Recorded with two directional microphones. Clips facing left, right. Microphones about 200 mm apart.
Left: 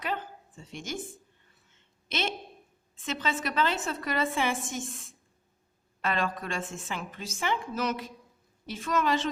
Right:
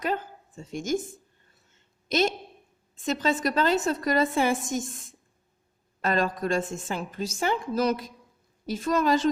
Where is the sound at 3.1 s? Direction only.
40° right (ahead or behind).